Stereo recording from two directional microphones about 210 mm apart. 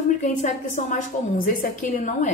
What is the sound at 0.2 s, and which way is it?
A woman's voice, 35° left (ahead or behind).